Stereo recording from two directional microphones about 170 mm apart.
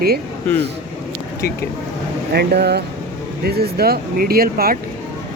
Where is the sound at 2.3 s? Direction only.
75° right (ahead or behind).